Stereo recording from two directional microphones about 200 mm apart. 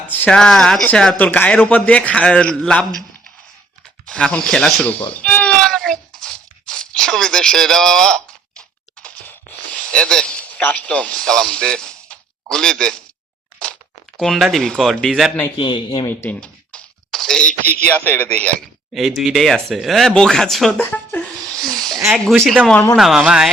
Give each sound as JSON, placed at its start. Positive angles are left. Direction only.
{"t": 0.1, "sound": "a man's voice", "side_deg": 5}
{"t": 5.1, "sound": "a sound", "side_deg": 5}
{"t": 9.9, "sound": "a man's voice", "side_deg": 5}
{"t": 14.2, "sound": "a man's voice", "side_deg": 0}
{"t": 15.5, "sound": "speech", "side_deg": 25}
{"t": 16.0, "sound": "a sound", "side_deg": 10}
{"t": 17.9, "sound": "a man's voice", "side_deg": 10}